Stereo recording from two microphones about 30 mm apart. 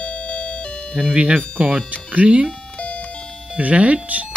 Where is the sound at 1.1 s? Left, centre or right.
Right.